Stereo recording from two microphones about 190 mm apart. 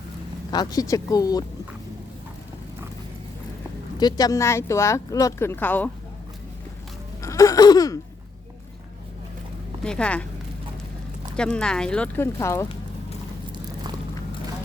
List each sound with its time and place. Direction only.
0.5 s speech: 20° left (ahead or behind)
3.9 s a woman's voice: 20° left (ahead or behind)
7.2 s a sound: 15° left (ahead or behind)
9.8 s speech: 5° left (ahead or behind)
11.3 s speech: 5° left (ahead or behind)